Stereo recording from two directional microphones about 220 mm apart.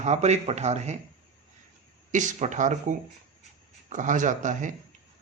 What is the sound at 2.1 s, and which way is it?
Speech, 35° right (ahead or behind).